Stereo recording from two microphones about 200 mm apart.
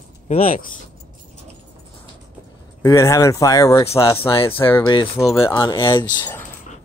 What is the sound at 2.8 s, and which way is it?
Speech, 15° left (ahead or behind).